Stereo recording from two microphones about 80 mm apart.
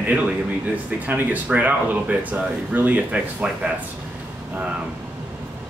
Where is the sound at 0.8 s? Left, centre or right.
Right.